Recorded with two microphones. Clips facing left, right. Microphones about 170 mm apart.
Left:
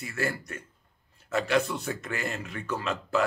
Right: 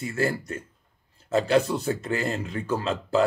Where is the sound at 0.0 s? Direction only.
30° right (ahead or behind).